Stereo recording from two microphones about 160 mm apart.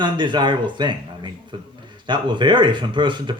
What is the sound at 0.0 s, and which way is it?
Speech, 30° right (ahead or behind).